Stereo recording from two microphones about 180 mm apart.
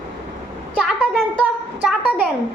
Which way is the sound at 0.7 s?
Centre (ahead or behind).